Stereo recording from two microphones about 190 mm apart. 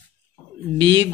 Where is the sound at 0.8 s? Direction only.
25° right (ahead or behind).